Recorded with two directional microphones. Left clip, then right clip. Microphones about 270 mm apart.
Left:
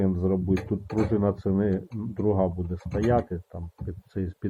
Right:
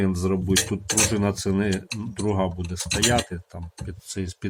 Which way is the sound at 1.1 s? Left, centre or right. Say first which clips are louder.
Right 1 dB; centre.